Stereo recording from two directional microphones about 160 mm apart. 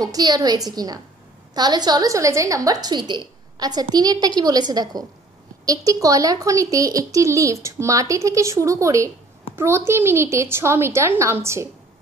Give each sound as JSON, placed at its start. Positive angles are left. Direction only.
{"t": 0.0, "sound": "a child's voice", "side_deg": -25}